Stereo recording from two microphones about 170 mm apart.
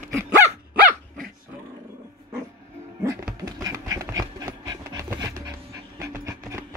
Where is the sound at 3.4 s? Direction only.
20° right (ahead or behind).